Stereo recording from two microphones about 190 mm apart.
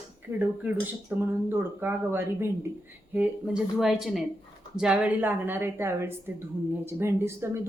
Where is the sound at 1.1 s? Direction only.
10° right (ahead or behind).